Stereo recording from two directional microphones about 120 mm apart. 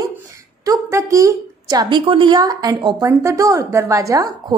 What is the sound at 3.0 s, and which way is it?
A woman's voice, 25° right (ahead or behind).